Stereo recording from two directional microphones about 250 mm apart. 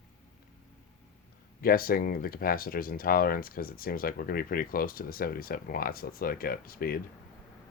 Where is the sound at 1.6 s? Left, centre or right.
Left.